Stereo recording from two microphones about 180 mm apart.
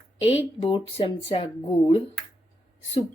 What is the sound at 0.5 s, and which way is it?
A woman's voice, 30° left (ahead or behind).